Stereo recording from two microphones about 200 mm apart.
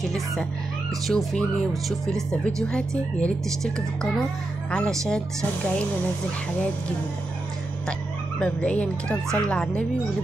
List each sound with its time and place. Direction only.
0.0 s a woman's voice: centre (ahead or behind)
8.4 s speech: 5° left (ahead or behind)